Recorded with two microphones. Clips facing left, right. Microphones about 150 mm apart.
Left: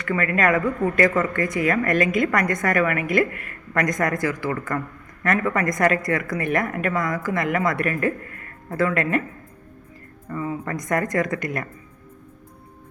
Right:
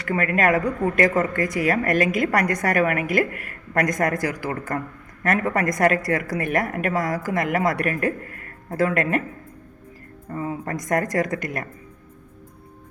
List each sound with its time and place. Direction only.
0.0 s a woman's voice: 40° right (ahead or behind)
10.3 s a woman's voice: 45° right (ahead or behind)